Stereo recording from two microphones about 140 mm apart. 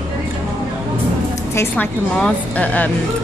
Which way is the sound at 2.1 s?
5° left (ahead or behind).